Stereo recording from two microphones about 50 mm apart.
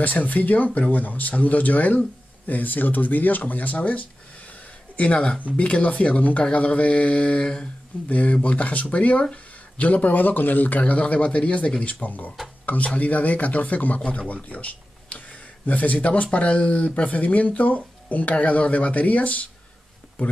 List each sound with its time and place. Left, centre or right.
0.0 s speech: left
10.8 s speech: left